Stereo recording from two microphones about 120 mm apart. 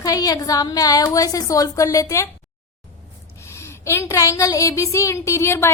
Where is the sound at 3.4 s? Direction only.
25° left (ahead or behind).